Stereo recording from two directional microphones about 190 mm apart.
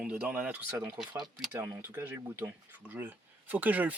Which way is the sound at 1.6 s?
10° right (ahead or behind).